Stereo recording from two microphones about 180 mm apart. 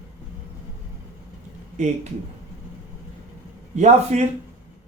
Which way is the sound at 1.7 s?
40° right (ahead or behind).